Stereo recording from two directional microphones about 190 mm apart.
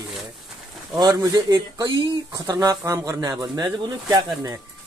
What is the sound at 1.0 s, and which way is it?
Speech, 20° right (ahead or behind).